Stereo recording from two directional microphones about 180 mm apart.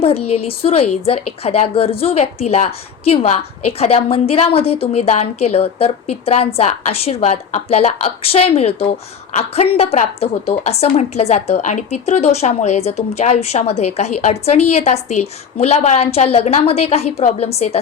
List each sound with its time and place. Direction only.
0.0 s a woman's voice: 35° left (ahead or behind)